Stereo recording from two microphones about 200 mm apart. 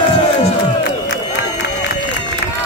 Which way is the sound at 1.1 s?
60° left (ahead or behind).